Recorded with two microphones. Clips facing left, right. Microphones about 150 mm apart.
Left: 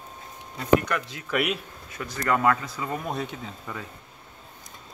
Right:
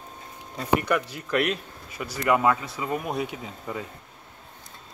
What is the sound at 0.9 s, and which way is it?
Speech, 10° right (ahead or behind).